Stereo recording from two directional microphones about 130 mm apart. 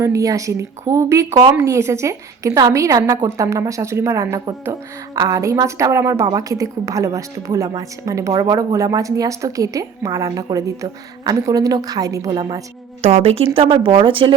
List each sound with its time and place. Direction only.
0.0 s a woman's voice: 25° right (ahead or behind)
13.0 s speech: 50° right (ahead or behind)